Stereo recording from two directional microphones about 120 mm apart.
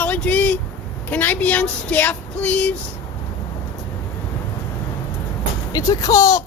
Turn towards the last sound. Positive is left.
turn(degrees=30)  # may be behind; listen again after turning